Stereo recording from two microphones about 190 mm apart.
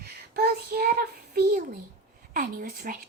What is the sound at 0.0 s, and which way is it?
A child's voice, 55° right (ahead or behind).